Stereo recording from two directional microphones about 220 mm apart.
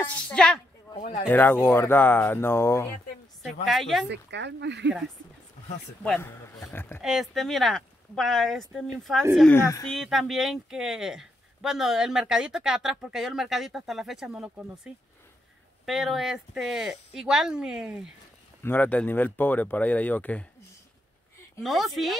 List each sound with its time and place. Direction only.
0.0 s a woman's voice: 5° left (ahead or behind)
0.9 s speech: 30° left (ahead or behind)
1.3 s speech: 10° left (ahead or behind)
3.6 s speech: centre (ahead or behind)
4.1 s speech: 50° right (ahead or behind)
6.0 s speech: 10° left (ahead or behind)
7.0 s speech: centre (ahead or behind)
9.5 s speech: 15° left (ahead or behind)
9.8 s speech: centre (ahead or behind)
15.8 s speech: centre (ahead or behind)
18.6 s speech: 10° left (ahead or behind)
21.6 s speech: centre (ahead or behind)